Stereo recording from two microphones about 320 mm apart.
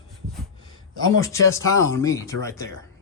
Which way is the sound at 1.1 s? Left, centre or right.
Centre.